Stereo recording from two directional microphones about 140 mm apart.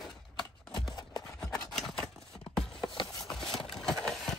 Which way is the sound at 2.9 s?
35° left (ahead or behind).